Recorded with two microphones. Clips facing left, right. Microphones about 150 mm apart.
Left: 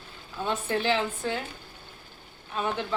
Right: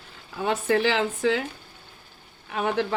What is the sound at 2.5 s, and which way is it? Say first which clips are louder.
Speech: right 4 dB; 70° right (ahead or behind).